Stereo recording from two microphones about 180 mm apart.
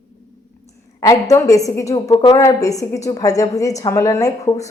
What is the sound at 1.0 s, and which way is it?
A woman's voice, 20° left (ahead or behind).